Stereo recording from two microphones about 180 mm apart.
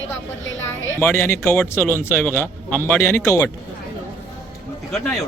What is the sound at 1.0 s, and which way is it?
A man's voice, 15° left (ahead or behind).